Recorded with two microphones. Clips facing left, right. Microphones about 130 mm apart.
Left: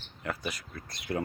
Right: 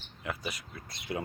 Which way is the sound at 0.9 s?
25° right (ahead or behind).